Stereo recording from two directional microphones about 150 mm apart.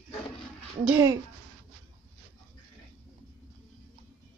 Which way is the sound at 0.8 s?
20° right (ahead or behind).